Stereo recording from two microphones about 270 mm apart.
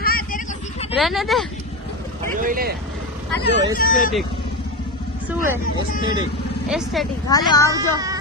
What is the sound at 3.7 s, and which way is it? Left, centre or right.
Speech, left.